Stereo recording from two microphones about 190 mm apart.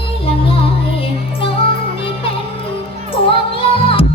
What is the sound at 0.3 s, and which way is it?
Music, 30° left (ahead or behind).